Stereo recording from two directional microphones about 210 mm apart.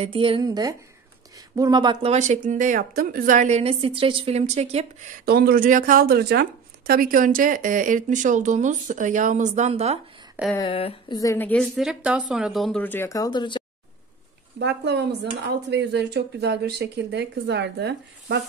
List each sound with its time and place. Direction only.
0.0 s a woman's voice: 25° right (ahead or behind)
5.2 s speech: 45° right (ahead or behind); by 9.9 s 30° right (ahead or behind)
10.5 s a woman's voice: 25° left (ahead or behind)
14.6 s speech: 55° right (ahead or behind)